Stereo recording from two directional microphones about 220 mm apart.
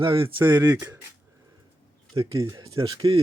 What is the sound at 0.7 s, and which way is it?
Speech, 10° right (ahead or behind).